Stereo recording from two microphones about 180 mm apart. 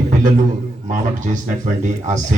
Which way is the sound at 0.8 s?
45° right (ahead or behind).